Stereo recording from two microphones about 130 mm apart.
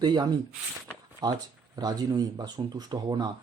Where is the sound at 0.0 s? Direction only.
35° right (ahead or behind).